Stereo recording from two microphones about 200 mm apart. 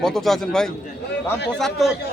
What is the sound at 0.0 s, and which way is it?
Speech, centre (ahead or behind).